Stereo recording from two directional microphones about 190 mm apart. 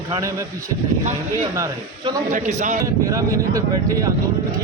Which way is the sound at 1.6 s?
15° right (ahead or behind).